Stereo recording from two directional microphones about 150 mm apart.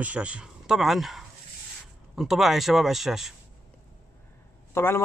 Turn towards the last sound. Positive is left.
turn(degrees=15)  # may be behind; listen again after turning